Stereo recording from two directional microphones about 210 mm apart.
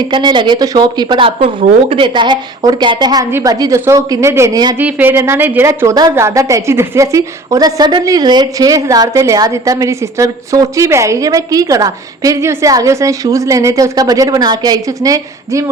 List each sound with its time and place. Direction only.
0.0 s a woman's voice: 20° right (ahead or behind)